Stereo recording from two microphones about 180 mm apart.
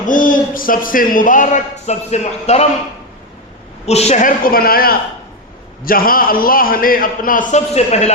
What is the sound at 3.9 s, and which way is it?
A man's voice, 35° left (ahead or behind).